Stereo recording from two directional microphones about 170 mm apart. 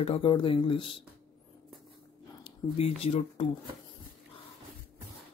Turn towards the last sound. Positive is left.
turn(degrees=35)  # may be behind; listen again after turning